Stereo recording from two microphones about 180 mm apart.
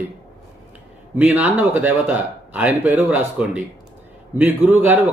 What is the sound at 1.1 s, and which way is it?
A man's voice, 10° right (ahead or behind).